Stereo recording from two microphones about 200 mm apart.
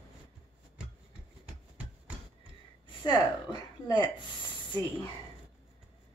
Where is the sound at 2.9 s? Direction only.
25° left (ahead or behind).